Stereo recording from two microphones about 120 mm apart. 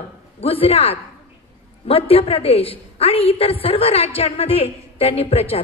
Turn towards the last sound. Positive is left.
turn(degrees=55)  # may be behind; listen again after turning